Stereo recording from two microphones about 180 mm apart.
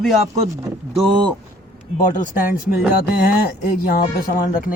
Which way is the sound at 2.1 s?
50° left (ahead or behind).